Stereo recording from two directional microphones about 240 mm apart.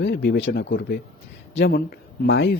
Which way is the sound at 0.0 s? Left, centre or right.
Left.